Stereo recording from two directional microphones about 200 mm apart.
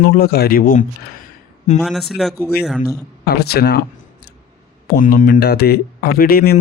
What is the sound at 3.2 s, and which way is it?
Speech, 50° left (ahead or behind).